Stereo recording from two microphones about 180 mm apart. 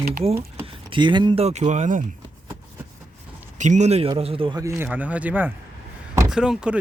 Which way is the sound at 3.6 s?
40° right (ahead or behind).